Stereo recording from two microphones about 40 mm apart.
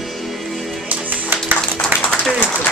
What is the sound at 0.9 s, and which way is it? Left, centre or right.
Music, right.